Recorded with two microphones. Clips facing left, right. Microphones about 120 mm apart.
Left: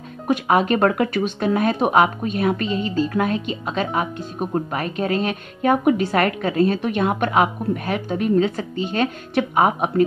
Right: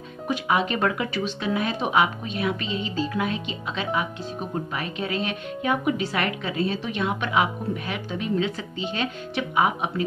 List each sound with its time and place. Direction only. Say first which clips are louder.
0.3 s speech: left 6 dB; 50° left (ahead or behind)